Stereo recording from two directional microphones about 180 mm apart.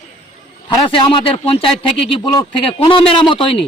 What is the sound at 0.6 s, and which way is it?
A man's voice, 25° left (ahead or behind).